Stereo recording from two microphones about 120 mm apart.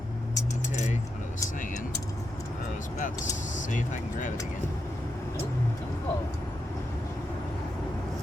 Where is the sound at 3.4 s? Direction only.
90° left.